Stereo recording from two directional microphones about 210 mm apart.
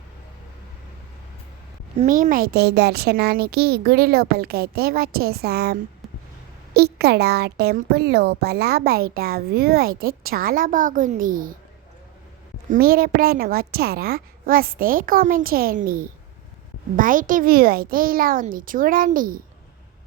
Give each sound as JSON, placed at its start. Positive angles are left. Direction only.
{"t": 2.0, "sound": "a child's voice", "side_deg": -35}
{"t": 6.7, "sound": "a child's voice", "side_deg": -50}
{"t": 12.7, "sound": "a child's voice", "side_deg": -45}